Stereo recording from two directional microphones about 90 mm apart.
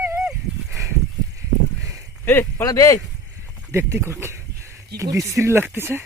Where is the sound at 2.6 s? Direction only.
40° left (ahead or behind).